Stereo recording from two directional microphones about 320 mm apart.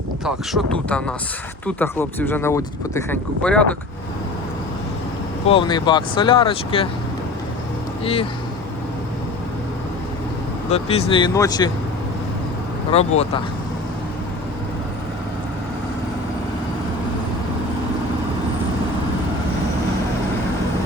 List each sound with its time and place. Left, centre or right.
0.3 s speech: centre
5.5 s speech: centre
8.0 s speech: centre
10.7 s speech: centre
12.9 s speech: centre